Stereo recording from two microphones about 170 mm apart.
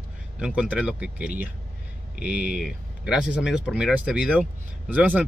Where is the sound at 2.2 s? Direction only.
70° left (ahead or behind).